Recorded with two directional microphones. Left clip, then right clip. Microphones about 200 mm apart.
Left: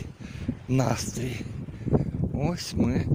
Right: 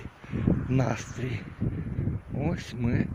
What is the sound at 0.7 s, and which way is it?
Speech, 10° left (ahead or behind).